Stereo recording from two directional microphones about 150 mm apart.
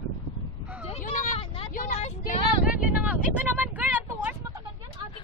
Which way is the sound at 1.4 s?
40° left (ahead or behind).